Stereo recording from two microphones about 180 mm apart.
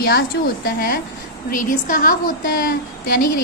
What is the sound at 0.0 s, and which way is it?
A woman's voice, 60° left (ahead or behind).